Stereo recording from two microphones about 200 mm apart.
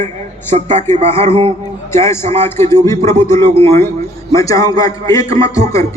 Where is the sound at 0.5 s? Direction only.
35° right (ahead or behind).